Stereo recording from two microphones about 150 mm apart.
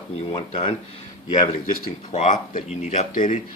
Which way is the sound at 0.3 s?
40° left (ahead or behind).